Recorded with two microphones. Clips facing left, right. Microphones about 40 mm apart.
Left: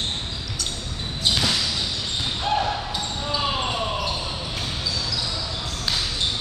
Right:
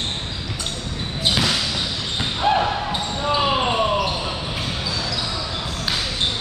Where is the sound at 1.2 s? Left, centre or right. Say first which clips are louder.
Right 2 dB; centre.